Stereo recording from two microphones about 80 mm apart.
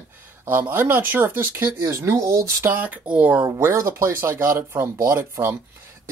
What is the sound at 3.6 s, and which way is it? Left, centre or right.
Speech, right.